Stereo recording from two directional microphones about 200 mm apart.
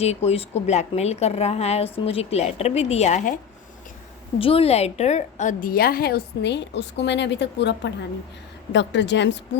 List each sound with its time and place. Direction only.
0.0 s a woman's voice: 30° left (ahead or behind)
4.4 s a woman's voice: 30° left (ahead or behind); by 9.4 s 60° left (ahead or behind)